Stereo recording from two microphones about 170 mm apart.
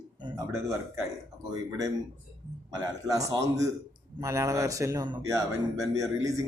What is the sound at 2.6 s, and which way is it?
A man's voice, 20° right (ahead or behind).